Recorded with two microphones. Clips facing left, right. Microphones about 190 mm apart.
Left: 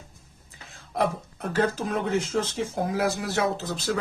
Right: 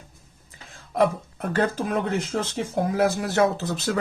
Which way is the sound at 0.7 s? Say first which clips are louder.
Right 4 dB; 55° right (ahead or behind).